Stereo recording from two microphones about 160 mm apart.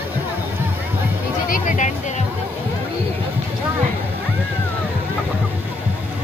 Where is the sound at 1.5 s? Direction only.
50° left (ahead or behind).